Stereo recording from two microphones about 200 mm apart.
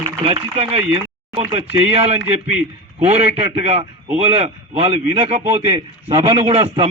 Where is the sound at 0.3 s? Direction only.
30° right (ahead or behind).